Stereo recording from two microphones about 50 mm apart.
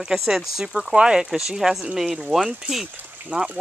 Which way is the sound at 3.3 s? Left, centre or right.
Right.